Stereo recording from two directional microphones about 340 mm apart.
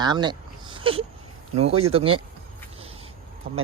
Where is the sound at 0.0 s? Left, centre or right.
Centre.